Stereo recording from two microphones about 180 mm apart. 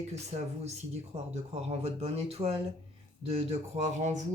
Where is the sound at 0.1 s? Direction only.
35° right (ahead or behind).